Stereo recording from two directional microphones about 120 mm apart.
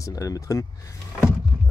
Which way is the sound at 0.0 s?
30° left (ahead or behind).